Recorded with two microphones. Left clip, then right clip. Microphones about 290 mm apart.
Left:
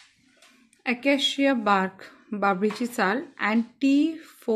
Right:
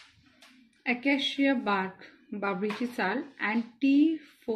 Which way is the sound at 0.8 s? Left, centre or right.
Left.